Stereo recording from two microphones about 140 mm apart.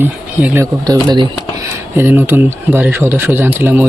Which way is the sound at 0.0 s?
15° right (ahead or behind).